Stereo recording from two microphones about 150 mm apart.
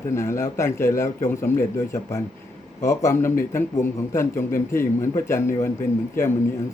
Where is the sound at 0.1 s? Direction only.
20° left (ahead or behind).